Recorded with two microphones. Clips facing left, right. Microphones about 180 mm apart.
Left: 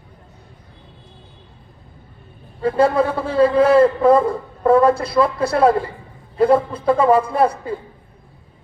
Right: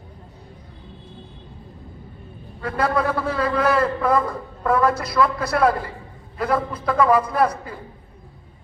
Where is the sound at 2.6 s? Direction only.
30° left (ahead or behind).